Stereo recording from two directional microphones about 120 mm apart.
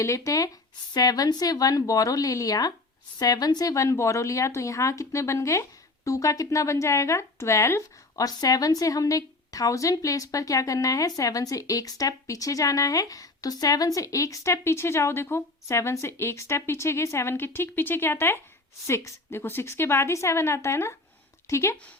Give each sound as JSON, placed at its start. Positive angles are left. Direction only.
{"t": 0.0, "sound": "speech", "side_deg": 30}